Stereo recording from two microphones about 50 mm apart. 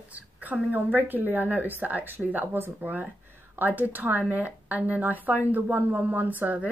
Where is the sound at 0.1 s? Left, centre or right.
Right.